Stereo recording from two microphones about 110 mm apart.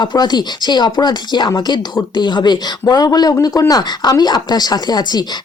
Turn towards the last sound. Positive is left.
turn(degrees=40)  # may be behind; listen again after turning